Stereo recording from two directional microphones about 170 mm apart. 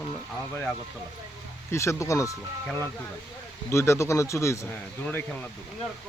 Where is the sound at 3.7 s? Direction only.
15° left (ahead or behind).